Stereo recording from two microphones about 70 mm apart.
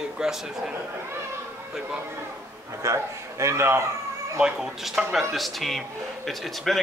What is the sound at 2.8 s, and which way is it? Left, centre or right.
A man's voice, right.